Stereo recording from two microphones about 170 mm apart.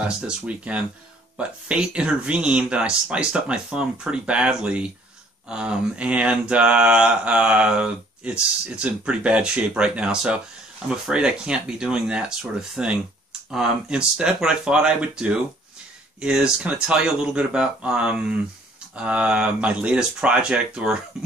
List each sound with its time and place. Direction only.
0.3 s mantra: 5° right (ahead or behind)
10.9 s speech: 5° right (ahead or behind)
18.9 s mantra: 5° right (ahead or behind)